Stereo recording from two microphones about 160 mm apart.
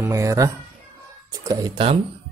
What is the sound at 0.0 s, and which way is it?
Speech, 20° right (ahead or behind).